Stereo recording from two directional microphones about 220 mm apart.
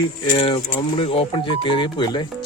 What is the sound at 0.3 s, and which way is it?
Speech, 25° left (ahead or behind).